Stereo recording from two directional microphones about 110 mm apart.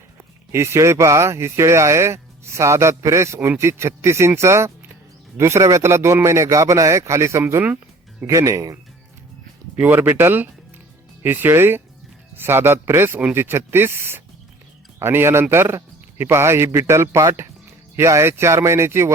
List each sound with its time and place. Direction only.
0.5 s speech: 25° right (ahead or behind)